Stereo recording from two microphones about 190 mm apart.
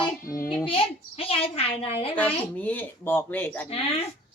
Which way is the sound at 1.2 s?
30° left (ahead or behind).